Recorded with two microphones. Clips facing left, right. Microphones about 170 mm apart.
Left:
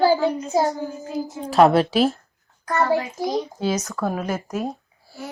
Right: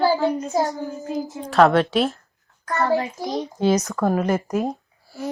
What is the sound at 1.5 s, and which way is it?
Speech, 5° left (ahead or behind).